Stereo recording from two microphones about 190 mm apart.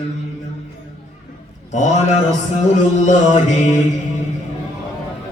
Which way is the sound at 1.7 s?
40° left (ahead or behind).